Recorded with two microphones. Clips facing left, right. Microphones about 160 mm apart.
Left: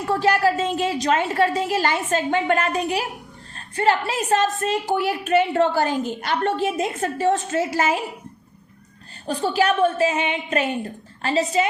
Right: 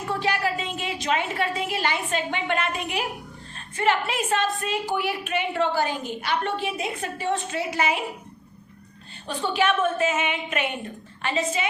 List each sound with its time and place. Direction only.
0.1 s a woman's voice: 40° left (ahead or behind)
9.2 s a woman's voice: 40° left (ahead or behind)